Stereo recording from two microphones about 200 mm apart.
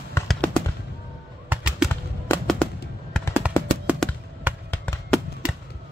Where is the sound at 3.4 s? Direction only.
5° right (ahead or behind).